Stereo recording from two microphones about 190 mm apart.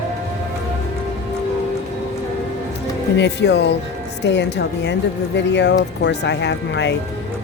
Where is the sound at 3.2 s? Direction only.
65° left (ahead or behind).